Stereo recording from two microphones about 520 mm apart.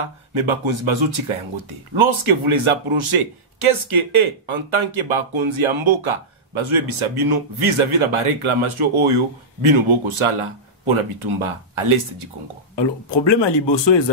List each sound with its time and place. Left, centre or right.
0.0 s a man's voice: right
12.7 s speech: left